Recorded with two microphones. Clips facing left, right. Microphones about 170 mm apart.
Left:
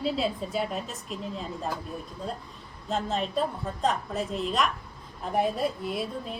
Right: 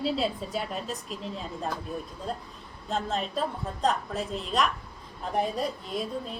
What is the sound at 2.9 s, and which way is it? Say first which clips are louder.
A woman's voice: left 2 dB; centre (ahead or behind).